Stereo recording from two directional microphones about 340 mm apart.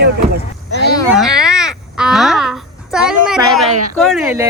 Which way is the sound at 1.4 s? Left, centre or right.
Centre.